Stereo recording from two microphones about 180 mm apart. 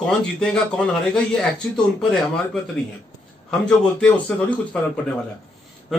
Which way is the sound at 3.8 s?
5° left (ahead or behind).